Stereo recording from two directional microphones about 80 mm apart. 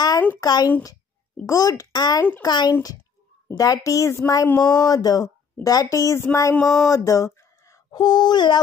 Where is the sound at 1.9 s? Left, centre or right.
Left.